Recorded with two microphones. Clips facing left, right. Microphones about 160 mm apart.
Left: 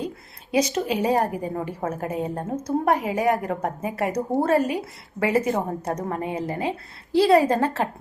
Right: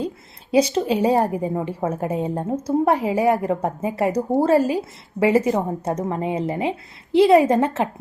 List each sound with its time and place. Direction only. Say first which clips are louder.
0.5 s a woman's voice: right 4 dB; 30° right (ahead or behind)